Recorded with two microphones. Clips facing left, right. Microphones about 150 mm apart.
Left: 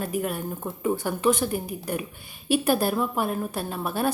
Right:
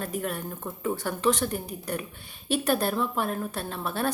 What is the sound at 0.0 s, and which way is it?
A woman's voice, 10° left (ahead or behind).